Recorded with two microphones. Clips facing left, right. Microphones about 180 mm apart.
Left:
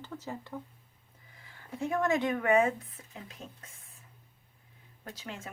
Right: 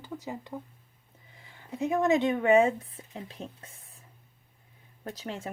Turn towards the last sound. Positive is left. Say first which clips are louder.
# right 6 dB
turn(degrees=-35)  # may be behind; listen again after turning